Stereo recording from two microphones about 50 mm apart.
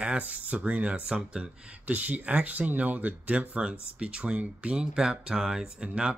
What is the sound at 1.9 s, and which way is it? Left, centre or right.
Speech, right.